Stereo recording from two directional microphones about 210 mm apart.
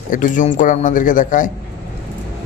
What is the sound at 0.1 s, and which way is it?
A man's voice, 35° left (ahead or behind).